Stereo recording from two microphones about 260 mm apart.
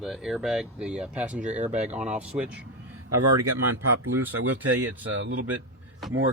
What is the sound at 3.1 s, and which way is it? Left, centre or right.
Speech, right.